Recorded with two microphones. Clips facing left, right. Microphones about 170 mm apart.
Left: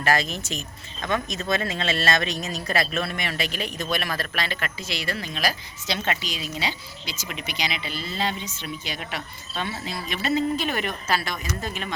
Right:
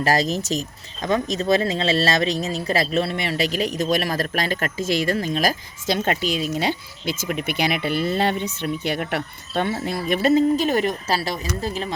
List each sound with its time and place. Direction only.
0.0 s speech: 35° right (ahead or behind)